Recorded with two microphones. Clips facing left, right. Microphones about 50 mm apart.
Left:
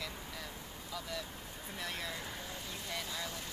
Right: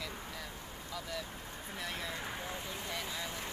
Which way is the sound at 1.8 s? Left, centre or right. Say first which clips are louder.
Even; centre.